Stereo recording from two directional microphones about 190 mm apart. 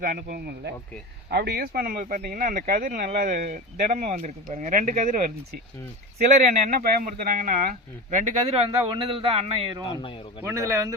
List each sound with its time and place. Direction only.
0.0 s speech: 45° right (ahead or behind)
6.3 s speech: 40° right (ahead or behind)
9.9 s speech: 25° left (ahead or behind)
10.4 s speech: 15° right (ahead or behind)